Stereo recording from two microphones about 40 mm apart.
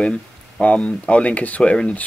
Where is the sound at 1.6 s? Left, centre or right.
Left.